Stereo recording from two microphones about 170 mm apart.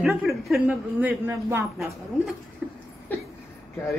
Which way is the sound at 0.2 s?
Centre (ahead or behind).